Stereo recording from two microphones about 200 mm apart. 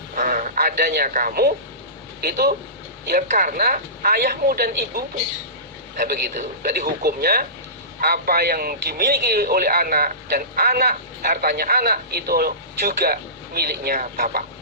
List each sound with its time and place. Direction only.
0.2 s a man's voice: 40° right (ahead or behind)